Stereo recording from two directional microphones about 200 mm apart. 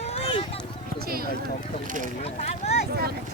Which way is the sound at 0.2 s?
30° left (ahead or behind).